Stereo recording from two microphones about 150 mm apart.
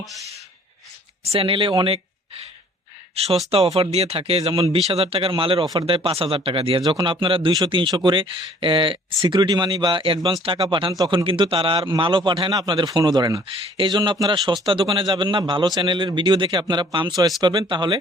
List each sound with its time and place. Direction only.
0.0 s a sound: centre (ahead or behind)
1.2 s speech: 40° right (ahead or behind)
3.2 s speech: 45° right (ahead or behind)